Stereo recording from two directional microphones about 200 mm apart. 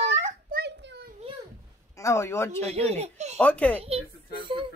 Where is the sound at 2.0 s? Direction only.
15° left (ahead or behind).